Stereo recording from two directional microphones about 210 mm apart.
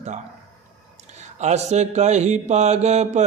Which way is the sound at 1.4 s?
30° right (ahead or behind).